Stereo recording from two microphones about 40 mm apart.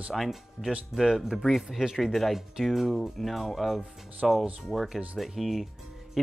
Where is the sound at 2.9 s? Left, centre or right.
Centre.